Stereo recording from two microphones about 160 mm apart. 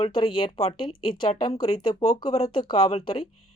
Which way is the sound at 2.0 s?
25° left (ahead or behind).